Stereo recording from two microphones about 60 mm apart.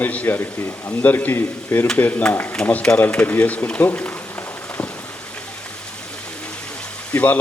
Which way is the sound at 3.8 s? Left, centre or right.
Left.